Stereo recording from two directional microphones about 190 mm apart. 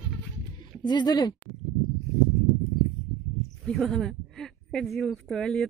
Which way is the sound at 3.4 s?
Centre (ahead or behind).